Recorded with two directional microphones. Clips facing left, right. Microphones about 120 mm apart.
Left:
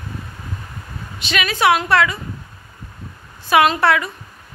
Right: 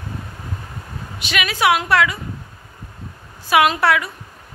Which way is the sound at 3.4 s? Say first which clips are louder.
Left 1 dB; 10° right (ahead or behind).